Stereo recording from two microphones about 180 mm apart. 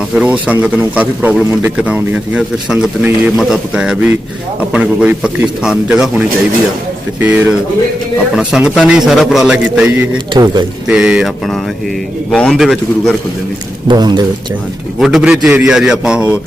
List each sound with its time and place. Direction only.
0.1 s a man's voice: 5° right (ahead or behind)
10.3 s a man's voice: 25° right (ahead or behind)
10.8 s a man's voice: 5° right (ahead or behind)
12.3 s a man's voice: centre (ahead or behind)
13.8 s a man's voice: 25° right (ahead or behind)
14.9 s a man's voice: centre (ahead or behind)